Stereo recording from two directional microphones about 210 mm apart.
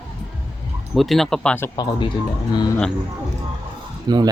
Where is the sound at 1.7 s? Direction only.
20° left (ahead or behind).